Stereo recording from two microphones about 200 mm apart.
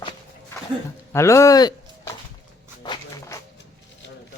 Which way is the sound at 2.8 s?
20° left (ahead or behind).